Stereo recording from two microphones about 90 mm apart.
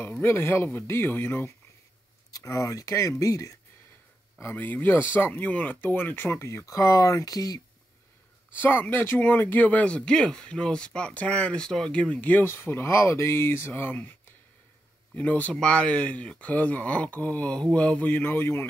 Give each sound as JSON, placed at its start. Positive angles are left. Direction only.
{"t": 0.2, "sound": "speech", "side_deg": 30}
{"t": 2.3, "sound": "speech", "side_deg": 40}
{"t": 4.4, "sound": "speech", "side_deg": 25}
{"t": 8.5, "sound": "speech", "side_deg": 25}
{"t": 12.4, "sound": "speech", "side_deg": 30}
{"t": 15.1, "sound": "speech", "side_deg": 20}